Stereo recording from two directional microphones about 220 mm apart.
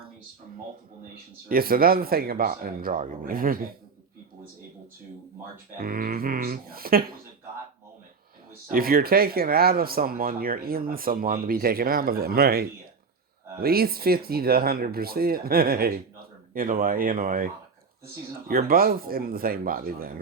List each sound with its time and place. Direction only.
1.5 s speech: 40° right (ahead or behind)
5.7 s speech: 40° right (ahead or behind)
8.7 s speech: 40° right (ahead or behind)